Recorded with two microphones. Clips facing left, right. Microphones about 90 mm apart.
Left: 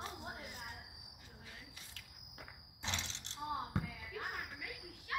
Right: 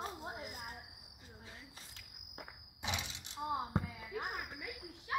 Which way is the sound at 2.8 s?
10° right (ahead or behind).